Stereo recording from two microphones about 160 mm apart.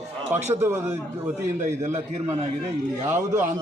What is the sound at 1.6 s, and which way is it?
Speech, 45° right (ahead or behind).